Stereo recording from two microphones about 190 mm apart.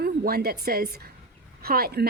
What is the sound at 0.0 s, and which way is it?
A woman's voice, 55° right (ahead or behind).